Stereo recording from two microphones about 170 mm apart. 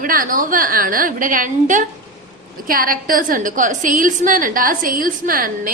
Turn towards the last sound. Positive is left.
turn(degrees=-55)  # may be behind; listen again after turning